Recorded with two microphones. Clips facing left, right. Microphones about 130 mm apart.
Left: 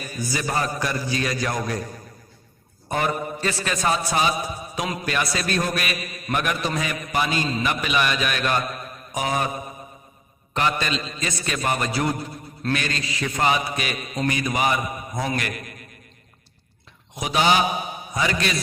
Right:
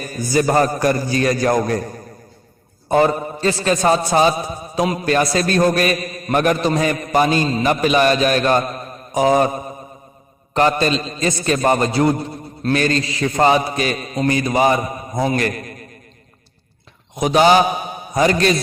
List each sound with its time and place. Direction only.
0.0 s a man's voice: 45° right (ahead or behind)
2.9 s a man's voice: 30° right (ahead or behind)
17.2 s a man's voice: 40° right (ahead or behind)